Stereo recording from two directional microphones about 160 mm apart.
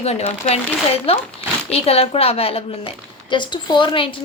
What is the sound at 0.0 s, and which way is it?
A woman's voice, 40° left (ahead or behind).